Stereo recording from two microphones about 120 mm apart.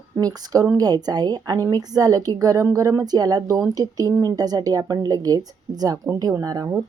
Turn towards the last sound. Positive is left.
turn(degrees=-30)  # may be behind; listen again after turning